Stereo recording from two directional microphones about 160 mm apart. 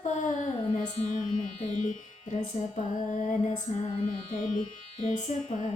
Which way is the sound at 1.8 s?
45° left (ahead or behind).